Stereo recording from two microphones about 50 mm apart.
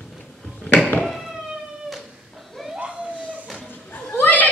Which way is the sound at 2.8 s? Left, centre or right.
Right.